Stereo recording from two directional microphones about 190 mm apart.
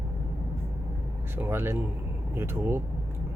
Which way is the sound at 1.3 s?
10° right (ahead or behind).